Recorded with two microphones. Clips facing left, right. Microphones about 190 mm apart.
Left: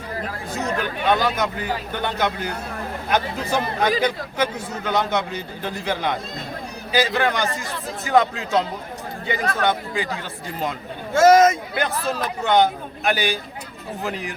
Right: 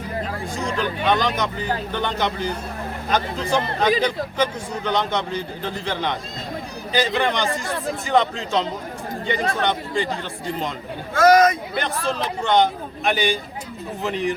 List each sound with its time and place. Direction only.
1.0 s a man's voice: 5° left (ahead or behind)
7.2 s a man's voice: 5° left (ahead or behind)
7.5 s speech: 55° right (ahead or behind)
8.0 s a man's voice: 5° left (ahead or behind)
11.1 s speech: 25° left (ahead or behind)
11.8 s a man's voice: 5° left (ahead or behind)